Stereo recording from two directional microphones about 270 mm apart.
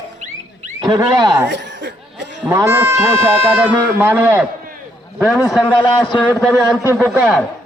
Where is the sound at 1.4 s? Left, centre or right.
Right.